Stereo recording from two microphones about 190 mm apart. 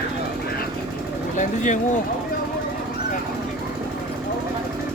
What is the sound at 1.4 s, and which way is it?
Speech, 40° left (ahead or behind).